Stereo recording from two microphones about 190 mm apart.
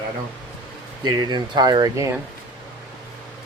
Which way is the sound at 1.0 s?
20° right (ahead or behind).